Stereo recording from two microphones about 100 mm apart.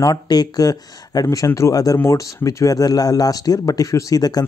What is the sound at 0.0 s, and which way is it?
Speech, 40° left (ahead or behind).